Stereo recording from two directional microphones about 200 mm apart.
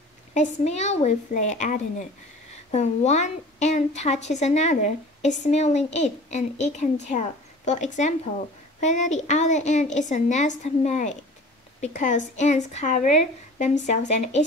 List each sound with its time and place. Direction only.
0.3 s a woman's voice: 35° left (ahead or behind)